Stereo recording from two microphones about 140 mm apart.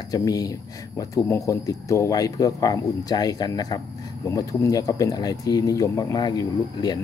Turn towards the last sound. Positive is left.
turn(degrees=30)  # may be behind; listen again after turning